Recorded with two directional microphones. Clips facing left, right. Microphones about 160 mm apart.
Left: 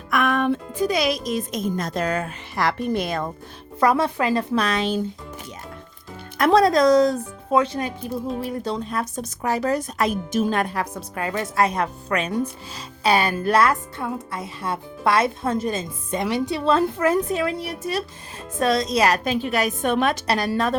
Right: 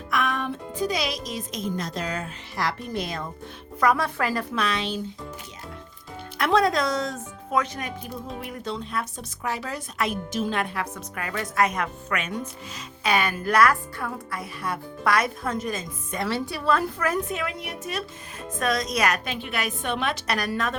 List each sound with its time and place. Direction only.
0.1 s speech: 60° left (ahead or behind)
3.8 s a woman's voice: 25° left (ahead or behind)
4.5 s speech: 40° left (ahead or behind)
6.4 s a woman's voice: 35° left (ahead or behind)
20.2 s speech: 30° left (ahead or behind)